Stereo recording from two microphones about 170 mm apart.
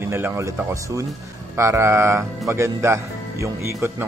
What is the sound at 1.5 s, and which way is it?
Speech, 15° right (ahead or behind).